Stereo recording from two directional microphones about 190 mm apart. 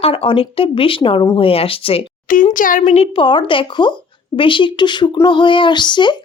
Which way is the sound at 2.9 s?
30° left (ahead or behind).